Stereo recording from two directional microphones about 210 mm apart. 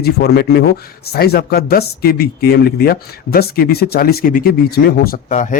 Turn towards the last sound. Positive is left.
turn(degrees=40)  # may be behind; listen again after turning